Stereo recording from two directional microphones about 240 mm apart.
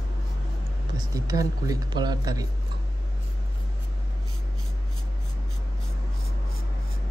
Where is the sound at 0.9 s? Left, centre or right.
Centre.